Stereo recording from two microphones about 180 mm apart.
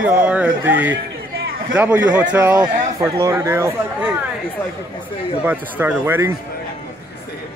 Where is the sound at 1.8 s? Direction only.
10° right (ahead or behind).